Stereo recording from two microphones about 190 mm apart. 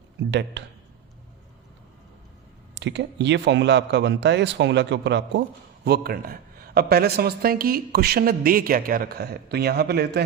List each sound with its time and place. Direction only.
0.3 s a man's voice: 70° right (ahead or behind)
2.7 s a man's voice: 65° right (ahead or behind)
5.8 s a man's voice: 55° right (ahead or behind)